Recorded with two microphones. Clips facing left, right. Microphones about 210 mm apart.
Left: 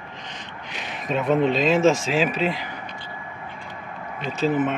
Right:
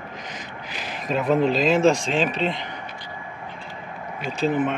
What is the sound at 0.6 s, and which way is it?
Speech, centre (ahead or behind).